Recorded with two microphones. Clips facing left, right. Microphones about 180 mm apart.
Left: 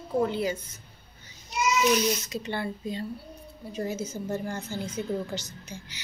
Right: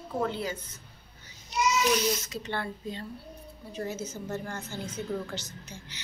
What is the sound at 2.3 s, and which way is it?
A woman's voice, 15° left (ahead or behind).